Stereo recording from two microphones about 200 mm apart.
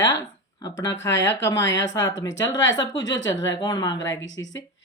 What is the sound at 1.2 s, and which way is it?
Speech, 15° left (ahead or behind).